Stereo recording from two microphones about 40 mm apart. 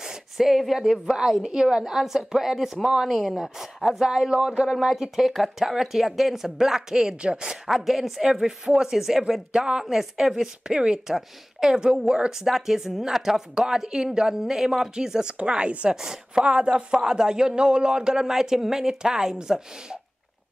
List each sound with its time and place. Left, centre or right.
0.0 s speech: centre
3.1 s speech: centre
4.7 s speech: centre; by 7.4 s right
7.4 s speech: centre; by 15.9 s right
15.9 s speech: centre
16.4 s speech: right